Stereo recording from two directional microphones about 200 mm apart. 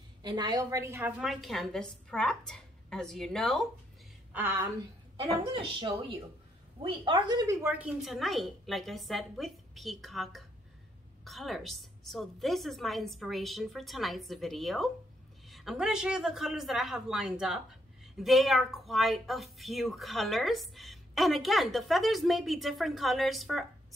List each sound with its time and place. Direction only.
0.2 s a woman's voice: 20° right (ahead or behind); by 3.6 s centre (ahead or behind)
4.3 s a woman's voice: 10° right (ahead or behind)
5.1 s a woman's voice: 25° right (ahead or behind); by 23.6 s centre (ahead or behind)